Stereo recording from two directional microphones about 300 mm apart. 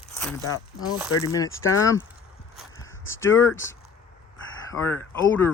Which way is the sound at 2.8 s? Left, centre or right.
Centre.